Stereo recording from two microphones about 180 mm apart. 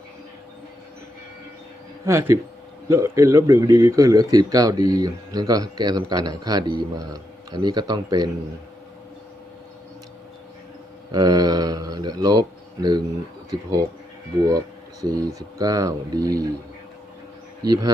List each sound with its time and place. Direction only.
2.0 s speech: 15° right (ahead or behind)
11.1 s a man's voice: 20° right (ahead or behind)
15.0 s speech: 20° right (ahead or behind)
17.7 s speech: 20° right (ahead or behind)